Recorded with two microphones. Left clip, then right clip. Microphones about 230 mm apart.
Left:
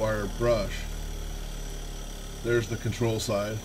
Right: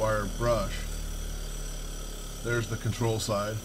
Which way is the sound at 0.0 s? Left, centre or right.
Centre.